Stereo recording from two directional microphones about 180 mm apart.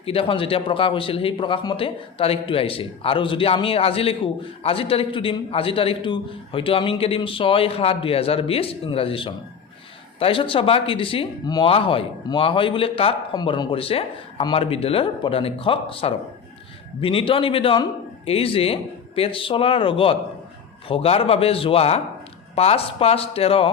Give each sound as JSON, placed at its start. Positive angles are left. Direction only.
{"t": 0.0, "sound": "a man's voice", "side_deg": 30}